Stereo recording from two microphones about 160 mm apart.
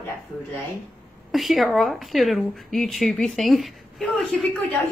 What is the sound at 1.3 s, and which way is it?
Speech, centre (ahead or behind).